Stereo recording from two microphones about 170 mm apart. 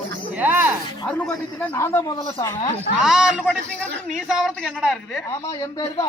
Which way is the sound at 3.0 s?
5° right (ahead or behind).